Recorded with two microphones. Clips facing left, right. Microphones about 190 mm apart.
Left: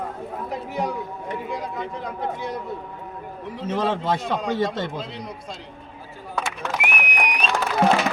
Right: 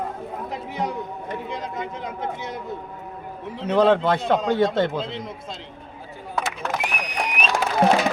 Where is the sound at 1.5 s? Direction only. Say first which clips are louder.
Left 1 dB; 20° right (ahead or behind).